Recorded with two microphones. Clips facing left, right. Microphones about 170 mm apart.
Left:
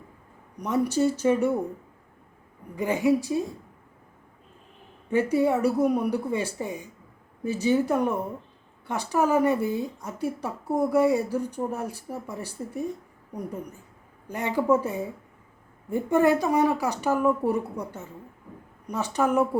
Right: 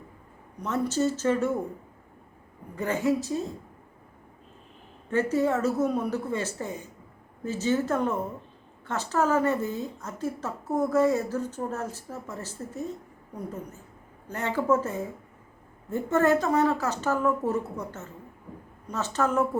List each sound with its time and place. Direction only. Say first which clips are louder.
0.6 s speech: left 3 dB; 15° left (ahead or behind)
2.7 s speech: left 3 dB; 15° left (ahead or behind)
5.0 s speech: left 2 dB; 10° left (ahead or behind)